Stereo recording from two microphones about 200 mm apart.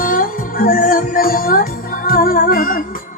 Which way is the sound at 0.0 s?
45° left (ahead or behind).